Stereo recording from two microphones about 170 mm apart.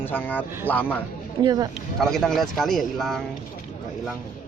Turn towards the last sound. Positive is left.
turn(degrees=0)  # may be behind; listen again after turning